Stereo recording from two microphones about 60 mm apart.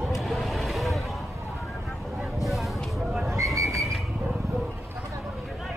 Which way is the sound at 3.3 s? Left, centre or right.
Right.